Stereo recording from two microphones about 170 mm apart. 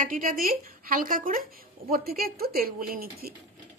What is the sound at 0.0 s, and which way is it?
Speech, 55° right (ahead or behind).